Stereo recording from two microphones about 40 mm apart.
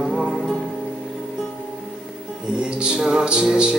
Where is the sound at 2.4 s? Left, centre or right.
Right.